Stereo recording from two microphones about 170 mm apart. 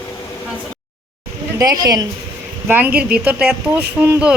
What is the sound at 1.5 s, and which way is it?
Speech, 20° right (ahead or behind).